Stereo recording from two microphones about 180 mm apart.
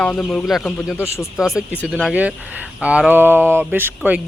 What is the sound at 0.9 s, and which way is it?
Speech, 15° left (ahead or behind).